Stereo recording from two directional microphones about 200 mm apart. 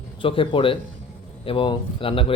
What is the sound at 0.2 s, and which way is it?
Speech, 25° left (ahead or behind).